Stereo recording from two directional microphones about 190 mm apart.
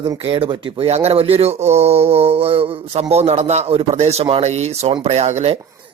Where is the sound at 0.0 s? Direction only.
20° right (ahead or behind).